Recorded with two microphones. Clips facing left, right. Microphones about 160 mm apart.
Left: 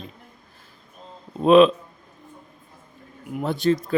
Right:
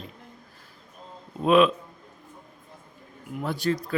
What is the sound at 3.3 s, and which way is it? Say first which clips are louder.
Speech: left 5 dB; 25° left (ahead or behind).